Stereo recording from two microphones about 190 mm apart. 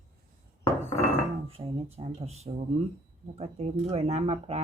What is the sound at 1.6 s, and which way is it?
Speech, 30° right (ahead or behind).